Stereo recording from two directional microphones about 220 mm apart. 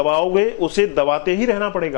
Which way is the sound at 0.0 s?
15° left (ahead or behind).